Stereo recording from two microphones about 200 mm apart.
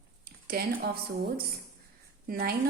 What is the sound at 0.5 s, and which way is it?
Speech, 50° right (ahead or behind).